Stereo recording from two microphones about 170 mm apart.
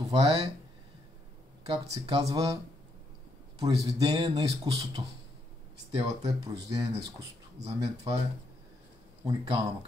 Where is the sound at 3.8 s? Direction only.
25° right (ahead or behind).